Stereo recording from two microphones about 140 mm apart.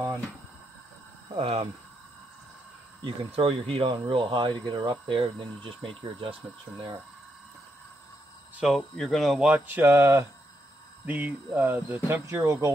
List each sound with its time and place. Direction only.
1.3 s speech: 40° right (ahead or behind)
3.0 s speech: 40° right (ahead or behind)
8.5 s speech: centre (ahead or behind); by 12.7 s 15° right (ahead or behind)